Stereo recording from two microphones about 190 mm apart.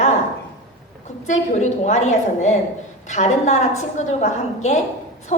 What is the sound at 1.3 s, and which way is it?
A woman's voice, 40° left (ahead or behind).